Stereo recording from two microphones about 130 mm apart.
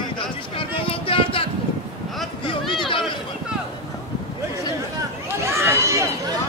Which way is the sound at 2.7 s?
40° left (ahead or behind).